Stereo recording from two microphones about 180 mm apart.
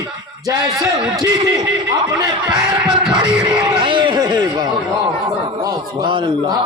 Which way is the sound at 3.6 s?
25° right (ahead or behind).